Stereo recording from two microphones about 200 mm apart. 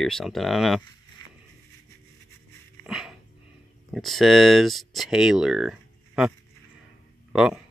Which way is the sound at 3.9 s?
Centre (ahead or behind).